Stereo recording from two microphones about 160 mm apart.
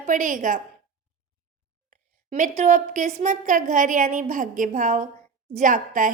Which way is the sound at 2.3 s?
55° right (ahead or behind).